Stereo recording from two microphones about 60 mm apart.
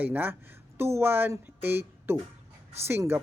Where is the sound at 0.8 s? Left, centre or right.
Right.